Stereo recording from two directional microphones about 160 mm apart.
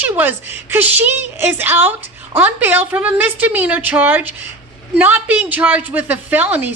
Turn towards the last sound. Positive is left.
turn(degrees=-10)  # may be behind; listen again after turning